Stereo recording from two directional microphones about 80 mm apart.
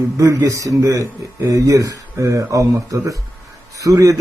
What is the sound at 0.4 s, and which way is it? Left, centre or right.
Speech, right.